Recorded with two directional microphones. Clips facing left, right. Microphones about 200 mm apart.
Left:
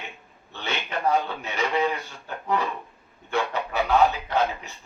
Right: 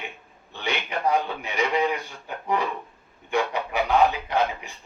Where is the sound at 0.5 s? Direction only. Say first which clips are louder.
Right 2 dB; 15° right (ahead or behind).